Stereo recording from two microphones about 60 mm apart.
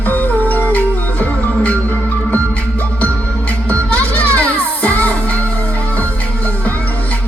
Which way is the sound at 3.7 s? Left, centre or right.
Left.